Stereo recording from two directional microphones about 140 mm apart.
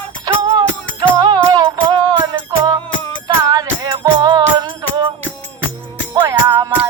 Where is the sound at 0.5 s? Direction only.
30° right (ahead or behind).